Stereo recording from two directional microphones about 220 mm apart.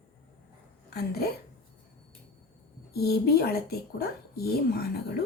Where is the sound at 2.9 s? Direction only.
45° left (ahead or behind).